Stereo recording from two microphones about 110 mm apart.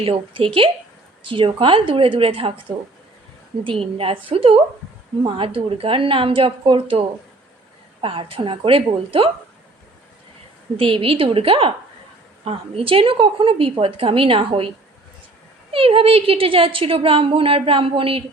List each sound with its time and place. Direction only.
0.0 s a woman's voice: 60° right (ahead or behind)
8.0 s a woman's voice: 55° right (ahead or behind)
10.8 s a woman's voice: 55° right (ahead or behind)
15.7 s a woman's voice: 55° right (ahead or behind)